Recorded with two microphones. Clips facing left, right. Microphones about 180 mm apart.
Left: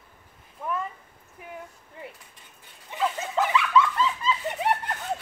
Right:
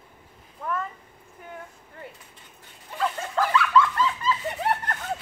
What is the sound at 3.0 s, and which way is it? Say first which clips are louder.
Snicker: even; 5° left (ahead or behind).